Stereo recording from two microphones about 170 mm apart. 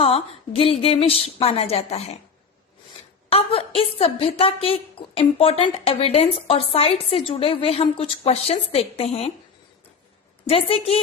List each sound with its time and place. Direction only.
0.0 s a woman's voice: 35° left (ahead or behind)
3.2 s a woman's voice: 35° left (ahead or behind)
10.4 s a woman's voice: 35° left (ahead or behind)